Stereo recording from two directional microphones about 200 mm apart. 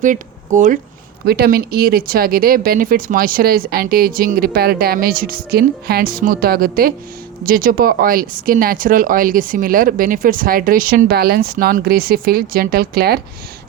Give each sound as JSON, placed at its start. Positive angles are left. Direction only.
{"t": 0.0, "sound": "speech", "side_deg": -40}
{"t": 1.2, "sound": "speech", "side_deg": -50}